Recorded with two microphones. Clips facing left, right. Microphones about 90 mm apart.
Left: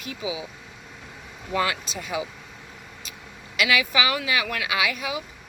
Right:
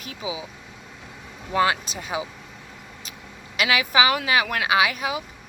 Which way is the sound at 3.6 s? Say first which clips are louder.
Right 2 dB; 35° right (ahead or behind).